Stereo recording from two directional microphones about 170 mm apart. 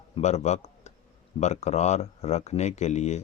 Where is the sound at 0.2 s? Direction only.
40° left (ahead or behind).